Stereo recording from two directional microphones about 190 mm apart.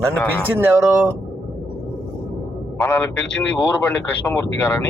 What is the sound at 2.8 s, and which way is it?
Speech, 10° left (ahead or behind).